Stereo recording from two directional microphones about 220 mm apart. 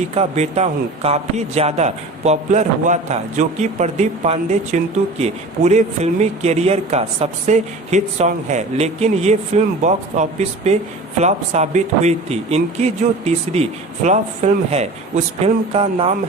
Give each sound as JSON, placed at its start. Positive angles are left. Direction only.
{"t": 0.1, "sound": "speech", "side_deg": -30}